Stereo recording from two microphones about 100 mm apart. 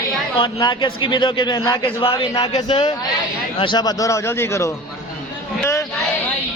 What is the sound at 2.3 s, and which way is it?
A man's voice, 45° left (ahead or behind).